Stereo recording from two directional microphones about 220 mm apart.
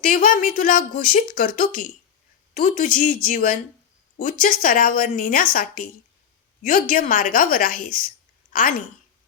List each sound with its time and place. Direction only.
0.0 s speech: 40° left (ahead or behind)